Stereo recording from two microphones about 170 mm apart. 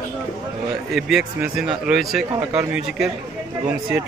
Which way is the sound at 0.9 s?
5° right (ahead or behind).